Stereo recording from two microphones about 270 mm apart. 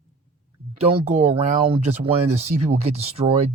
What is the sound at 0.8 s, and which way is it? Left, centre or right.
Speech, right.